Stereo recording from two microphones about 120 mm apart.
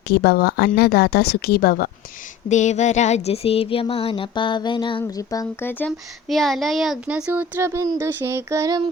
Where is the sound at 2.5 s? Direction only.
80° left; by 5.0 s 40° left (ahead or behind).